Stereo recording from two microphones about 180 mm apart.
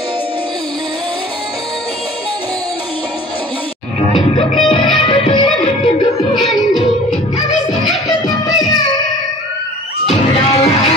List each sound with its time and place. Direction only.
4.1 s music: 30° left (ahead or behind)
6.3 s music: centre (ahead or behind)
8.5 s music: 20° left (ahead or behind)
10.0 s music: 35° left (ahead or behind)